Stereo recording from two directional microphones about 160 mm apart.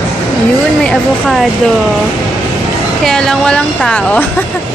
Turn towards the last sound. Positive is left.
turn(degrees=10)  # may be behind; listen again after turning